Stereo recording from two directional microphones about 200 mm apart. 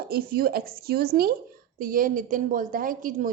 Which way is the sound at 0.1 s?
50° right (ahead or behind).